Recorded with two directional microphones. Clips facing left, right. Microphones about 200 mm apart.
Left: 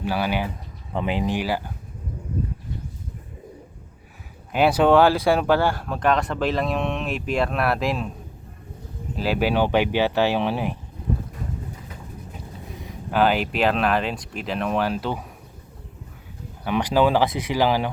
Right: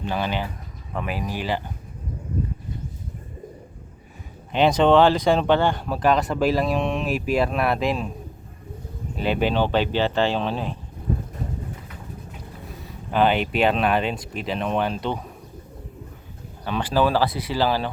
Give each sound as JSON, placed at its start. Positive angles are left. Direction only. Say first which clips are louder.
{"t": 0.0, "sound": "speech", "louder": "left 2 dB", "side_deg": 10}
{"t": 0.9, "sound": "speech", "louder": "left 5 dB", "side_deg": 25}
{"t": 1.4, "sound": "speech", "louder": "left 1 dB", "side_deg": 10}
{"t": 4.5, "sound": "speech", "louder": "even", "side_deg": 5}
{"t": 9.1, "sound": "speech", "louder": "even", "side_deg": 0}
{"t": 13.1, "sound": "speech", "louder": "even", "side_deg": 5}
{"t": 16.6, "sound": "speech", "louder": "left 2 dB", "side_deg": 15}